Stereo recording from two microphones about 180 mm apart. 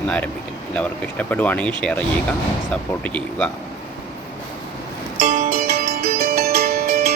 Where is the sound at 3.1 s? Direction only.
10° left (ahead or behind).